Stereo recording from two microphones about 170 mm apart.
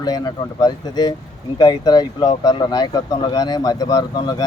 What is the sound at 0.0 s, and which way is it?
Speech, 25° left (ahead or behind).